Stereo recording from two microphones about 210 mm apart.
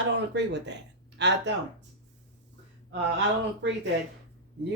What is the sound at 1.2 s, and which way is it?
Speech, 55° right (ahead or behind).